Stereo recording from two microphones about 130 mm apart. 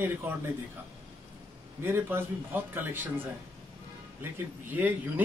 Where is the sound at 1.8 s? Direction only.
15° right (ahead or behind).